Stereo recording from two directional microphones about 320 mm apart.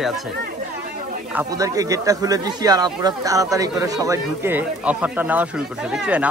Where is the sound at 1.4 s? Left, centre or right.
Centre.